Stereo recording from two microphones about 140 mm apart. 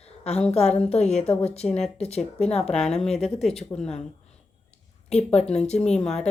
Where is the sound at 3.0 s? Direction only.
50° left (ahead or behind).